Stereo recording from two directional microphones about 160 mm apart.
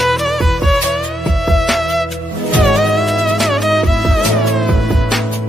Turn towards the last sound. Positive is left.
turn(degrees=0)  # may be behind; listen again after turning